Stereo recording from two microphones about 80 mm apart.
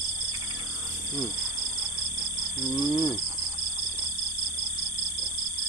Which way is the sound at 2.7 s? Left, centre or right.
Left.